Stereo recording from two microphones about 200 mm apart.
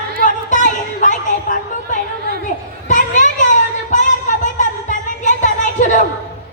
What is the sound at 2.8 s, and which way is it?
Children playing, 40° left (ahead or behind).